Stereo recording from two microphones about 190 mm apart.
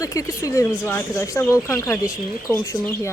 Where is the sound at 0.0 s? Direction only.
15° left (ahead or behind).